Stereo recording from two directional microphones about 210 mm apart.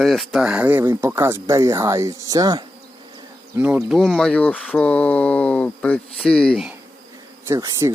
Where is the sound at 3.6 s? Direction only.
5° right (ahead or behind).